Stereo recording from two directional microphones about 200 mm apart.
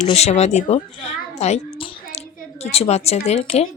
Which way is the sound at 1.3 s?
35° left (ahead or behind).